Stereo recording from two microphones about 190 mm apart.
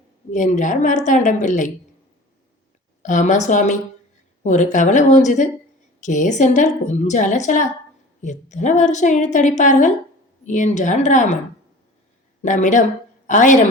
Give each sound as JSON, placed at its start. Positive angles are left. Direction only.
{"t": 0.3, "sound": "a woman's voice", "side_deg": 40}
{"t": 3.0, "sound": "a woman's voice", "side_deg": 40}
{"t": 12.4, "sound": "a woman's voice", "side_deg": 40}